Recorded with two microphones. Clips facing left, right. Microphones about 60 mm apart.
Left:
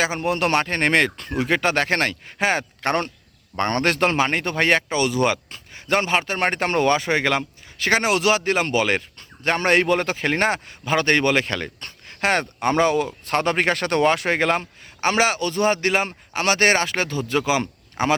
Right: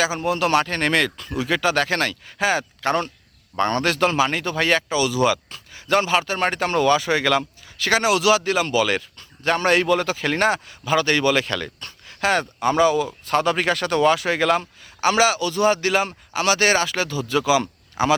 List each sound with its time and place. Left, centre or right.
0.0 s speech: left